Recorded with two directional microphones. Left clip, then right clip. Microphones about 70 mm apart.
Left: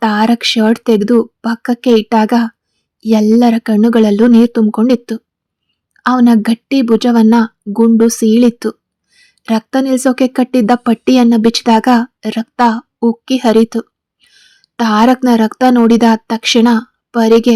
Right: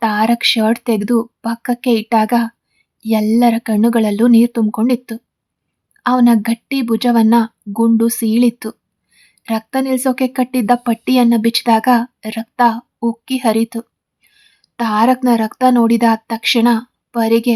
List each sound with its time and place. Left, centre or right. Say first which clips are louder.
0.0 s speech: left 2 dB; left